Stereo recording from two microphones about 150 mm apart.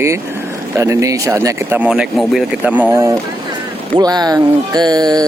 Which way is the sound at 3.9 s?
25° right (ahead or behind).